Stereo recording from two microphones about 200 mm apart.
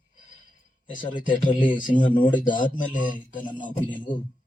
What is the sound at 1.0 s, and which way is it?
Speech, 40° left (ahead or behind).